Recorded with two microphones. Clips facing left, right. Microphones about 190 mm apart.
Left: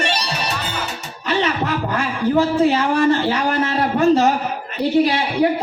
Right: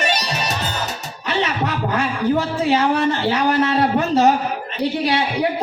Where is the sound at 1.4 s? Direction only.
50° left (ahead or behind).